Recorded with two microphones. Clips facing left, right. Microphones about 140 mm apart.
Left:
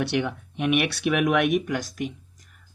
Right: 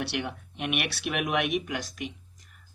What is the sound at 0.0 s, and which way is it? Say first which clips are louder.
Speech: left 7 dB; 50° left (ahead or behind).